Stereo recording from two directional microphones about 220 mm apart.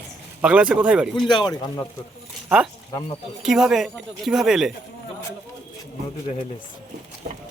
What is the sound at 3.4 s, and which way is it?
Speech, centre (ahead or behind).